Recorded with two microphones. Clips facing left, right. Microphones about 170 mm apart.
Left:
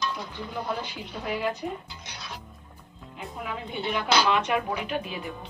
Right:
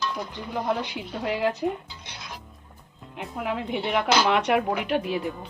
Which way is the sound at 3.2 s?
70° right (ahead or behind).